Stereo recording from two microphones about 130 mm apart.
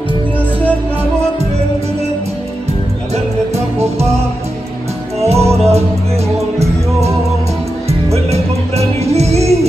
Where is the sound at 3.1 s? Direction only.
55° right (ahead or behind).